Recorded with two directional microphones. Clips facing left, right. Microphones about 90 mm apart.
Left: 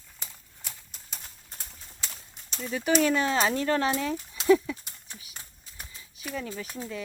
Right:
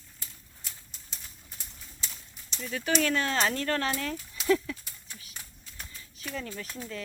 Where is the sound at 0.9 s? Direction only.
50° left (ahead or behind).